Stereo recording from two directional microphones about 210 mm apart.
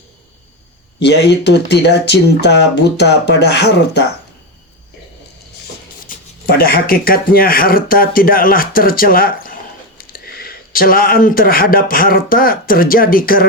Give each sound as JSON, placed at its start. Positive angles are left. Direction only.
{"t": 1.0, "sound": "speech", "side_deg": 55}
{"t": 6.4, "sound": "speech", "side_deg": 45}